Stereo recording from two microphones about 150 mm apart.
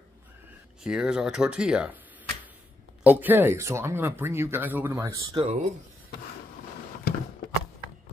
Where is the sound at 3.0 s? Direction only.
10° right (ahead or behind).